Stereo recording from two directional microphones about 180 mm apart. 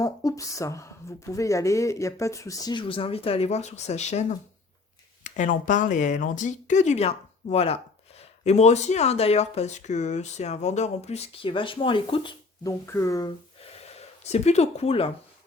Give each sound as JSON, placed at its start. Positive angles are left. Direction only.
{"t": 0.0, "sound": "speech", "side_deg": 20}
{"t": 12.8, "sound": "speech", "side_deg": 15}
{"t": 13.8, "sound": "speech", "side_deg": 35}